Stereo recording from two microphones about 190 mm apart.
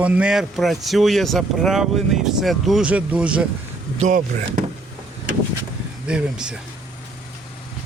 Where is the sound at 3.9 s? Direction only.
40° right (ahead or behind).